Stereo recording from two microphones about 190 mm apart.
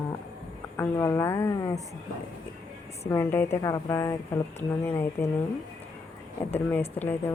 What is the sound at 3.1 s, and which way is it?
Speech, 10° left (ahead or behind).